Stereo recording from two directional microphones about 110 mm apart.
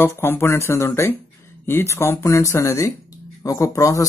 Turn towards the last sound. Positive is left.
turn(degrees=30)  # may be behind; listen again after turning